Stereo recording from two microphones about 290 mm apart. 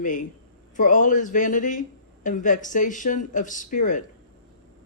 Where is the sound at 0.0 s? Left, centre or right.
Left.